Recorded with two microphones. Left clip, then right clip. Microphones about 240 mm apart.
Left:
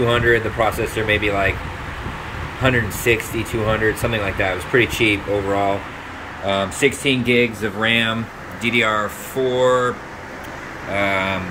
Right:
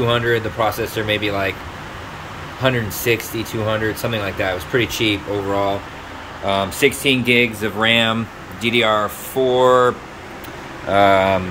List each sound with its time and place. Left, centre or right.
0.0 s speech: centre
2.6 s speech: centre
11.0 s speech: right